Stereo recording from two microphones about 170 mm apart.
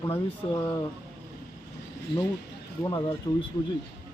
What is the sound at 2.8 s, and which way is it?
Speech, 20° left (ahead or behind).